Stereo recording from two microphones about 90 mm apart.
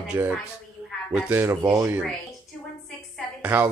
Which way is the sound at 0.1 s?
25° right (ahead or behind).